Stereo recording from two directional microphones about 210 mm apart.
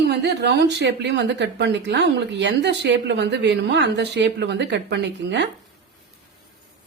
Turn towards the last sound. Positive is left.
turn(degrees=-55)  # may be behind; listen again after turning